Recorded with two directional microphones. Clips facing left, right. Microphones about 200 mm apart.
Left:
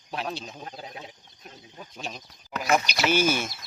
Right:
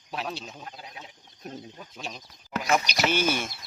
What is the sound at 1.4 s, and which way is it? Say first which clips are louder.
Speech: right 9 dB; 40° right (ahead or behind).